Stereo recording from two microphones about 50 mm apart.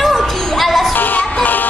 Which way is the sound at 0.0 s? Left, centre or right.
Centre.